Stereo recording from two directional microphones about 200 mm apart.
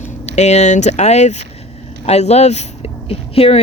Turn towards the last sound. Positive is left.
turn(degrees=30)  # may be behind; listen again after turning